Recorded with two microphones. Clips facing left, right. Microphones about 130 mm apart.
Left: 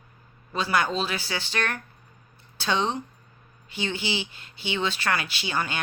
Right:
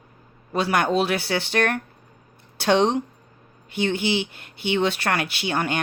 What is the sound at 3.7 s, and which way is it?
Speech, 55° right (ahead or behind).